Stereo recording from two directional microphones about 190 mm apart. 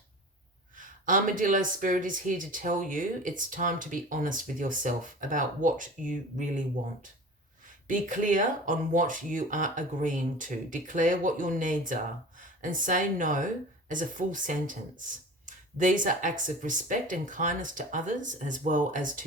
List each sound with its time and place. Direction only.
0.8 s speech: 45° right (ahead or behind)